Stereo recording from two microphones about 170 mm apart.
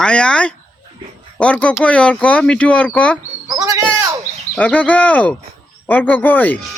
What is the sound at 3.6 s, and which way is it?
Bird, 20° right (ahead or behind).